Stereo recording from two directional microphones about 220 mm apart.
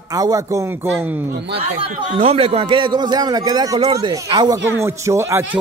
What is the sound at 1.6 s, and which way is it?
A man's voice, 30° right (ahead or behind).